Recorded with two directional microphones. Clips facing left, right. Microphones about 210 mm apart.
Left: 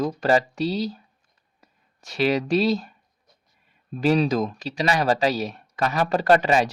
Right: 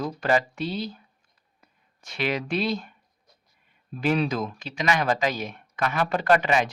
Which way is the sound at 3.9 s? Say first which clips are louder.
Left 4 dB; 35° left (ahead or behind).